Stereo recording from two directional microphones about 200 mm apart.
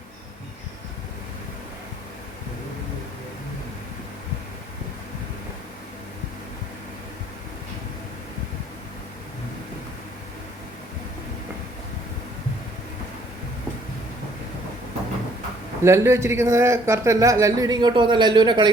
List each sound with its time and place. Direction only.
15.8 s a man's voice: 15° right (ahead or behind)